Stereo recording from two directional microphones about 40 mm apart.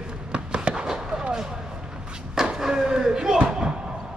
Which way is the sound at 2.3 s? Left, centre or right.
Centre.